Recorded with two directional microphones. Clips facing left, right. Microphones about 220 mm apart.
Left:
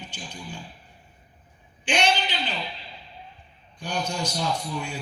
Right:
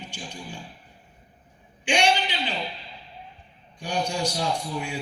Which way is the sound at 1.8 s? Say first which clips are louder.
Right 1 dB; 10° right (ahead or behind).